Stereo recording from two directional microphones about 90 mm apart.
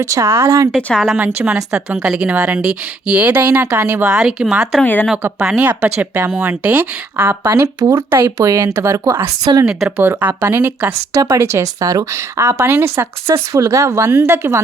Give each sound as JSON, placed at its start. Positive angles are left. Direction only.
{"t": 0.0, "sound": "speech", "side_deg": -35}
{"t": 0.8, "sound": "speech", "side_deg": 15}
{"t": 1.5, "sound": "speech", "side_deg": -10}
{"t": 4.1, "sound": "speech", "side_deg": -5}
{"t": 4.8, "sound": "speech", "side_deg": 20}
{"t": 5.5, "sound": "speech", "side_deg": -15}
{"t": 10.0, "sound": "speech", "side_deg": -20}
{"t": 11.1, "sound": "speech", "side_deg": -35}